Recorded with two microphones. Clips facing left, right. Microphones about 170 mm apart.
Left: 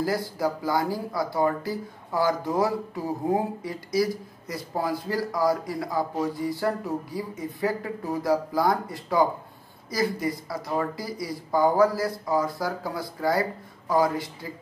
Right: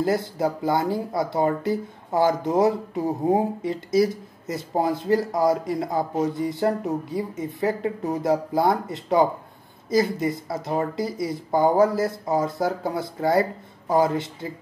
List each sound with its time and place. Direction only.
0.0 s speech: 25° right (ahead or behind)